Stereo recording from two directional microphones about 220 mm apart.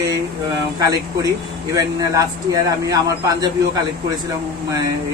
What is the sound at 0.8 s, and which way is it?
A man's voice, 15° right (ahead or behind).